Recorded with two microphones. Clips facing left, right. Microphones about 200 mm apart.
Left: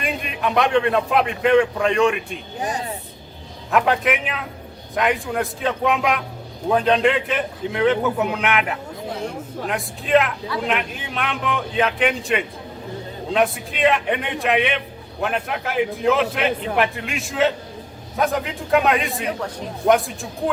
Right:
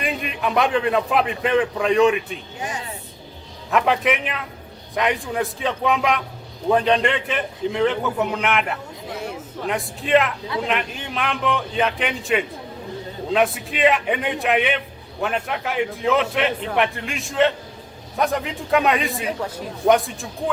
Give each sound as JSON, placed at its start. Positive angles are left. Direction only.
{"t": 0.0, "sound": "a man's voice", "side_deg": 0}
{"t": 2.6, "sound": "speech", "side_deg": 35}
{"t": 3.7, "sound": "a man's voice", "side_deg": 0}